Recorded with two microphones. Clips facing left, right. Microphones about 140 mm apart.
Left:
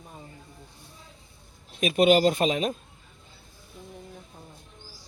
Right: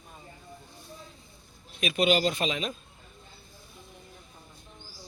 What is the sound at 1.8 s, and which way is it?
Speech, 45° left (ahead or behind).